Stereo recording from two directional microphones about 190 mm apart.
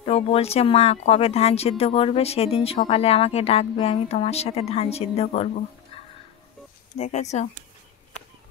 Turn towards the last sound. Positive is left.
turn(degrees=35)  # may be behind; listen again after turning